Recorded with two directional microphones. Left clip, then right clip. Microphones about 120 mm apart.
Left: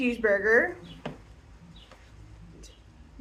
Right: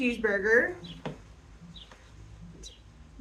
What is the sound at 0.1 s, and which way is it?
Speech, 25° right (ahead or behind).